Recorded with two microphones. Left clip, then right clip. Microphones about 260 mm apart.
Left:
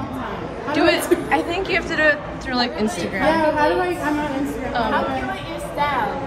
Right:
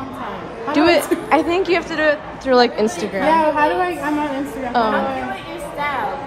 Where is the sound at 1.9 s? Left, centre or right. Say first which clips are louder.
Even; centre.